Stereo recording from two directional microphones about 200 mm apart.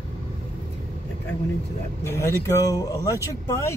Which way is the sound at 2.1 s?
15° left (ahead or behind).